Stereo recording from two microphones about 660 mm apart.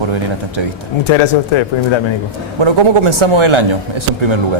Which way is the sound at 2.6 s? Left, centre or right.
Right.